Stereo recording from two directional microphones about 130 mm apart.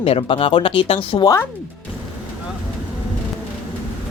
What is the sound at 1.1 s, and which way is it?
Speech, 30° left (ahead or behind).